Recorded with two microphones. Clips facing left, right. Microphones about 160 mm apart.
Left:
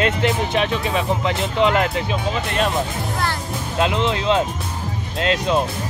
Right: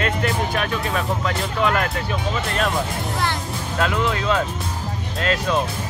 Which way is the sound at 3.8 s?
20° left (ahead or behind).